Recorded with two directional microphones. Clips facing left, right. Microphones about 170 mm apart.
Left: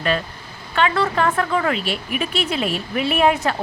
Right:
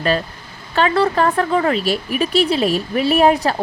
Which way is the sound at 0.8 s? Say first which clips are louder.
Right 3 dB; 35° right (ahead or behind).